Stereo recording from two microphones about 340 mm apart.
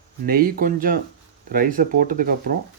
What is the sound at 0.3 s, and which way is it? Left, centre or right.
Speech, right.